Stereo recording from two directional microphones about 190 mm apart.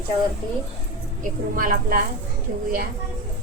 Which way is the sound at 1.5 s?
45° right (ahead or behind).